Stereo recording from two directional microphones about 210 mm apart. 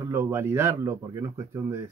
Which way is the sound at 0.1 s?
10° right (ahead or behind).